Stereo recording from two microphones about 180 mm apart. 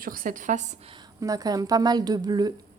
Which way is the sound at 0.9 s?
20° right (ahead or behind).